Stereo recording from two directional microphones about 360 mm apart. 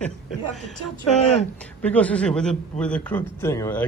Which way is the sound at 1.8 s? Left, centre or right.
Centre.